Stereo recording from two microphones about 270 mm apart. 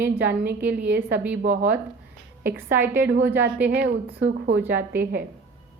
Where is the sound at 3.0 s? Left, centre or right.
Right.